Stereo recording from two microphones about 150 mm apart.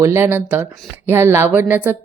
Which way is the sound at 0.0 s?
20° right (ahead or behind).